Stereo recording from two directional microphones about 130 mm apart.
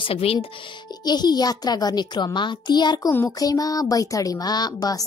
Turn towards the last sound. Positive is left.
turn(degrees=30)  # may be behind; listen again after turning